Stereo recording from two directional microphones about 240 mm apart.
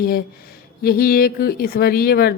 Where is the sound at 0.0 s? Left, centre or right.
Left.